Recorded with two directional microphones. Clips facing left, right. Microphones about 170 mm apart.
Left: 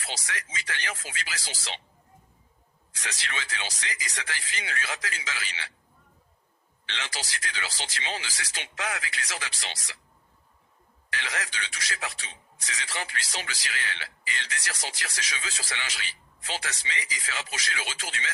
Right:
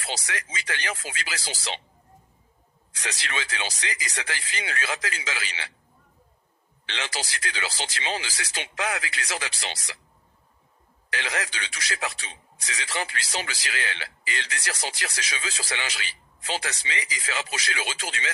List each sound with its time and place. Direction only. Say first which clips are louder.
0.3 s a man's voice: right 3 dB; 90° right
3.2 s a man's voice: right 4 dB; 90° right
6.8 s a man's voice: right 4 dB; 90° right
11.1 s a man's voice: right 4 dB; 90° right